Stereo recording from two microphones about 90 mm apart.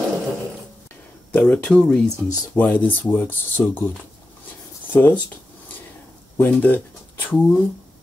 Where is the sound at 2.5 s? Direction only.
20° left (ahead or behind).